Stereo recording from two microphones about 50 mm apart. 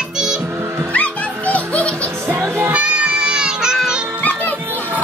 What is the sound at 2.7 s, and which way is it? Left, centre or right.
Child singing, right.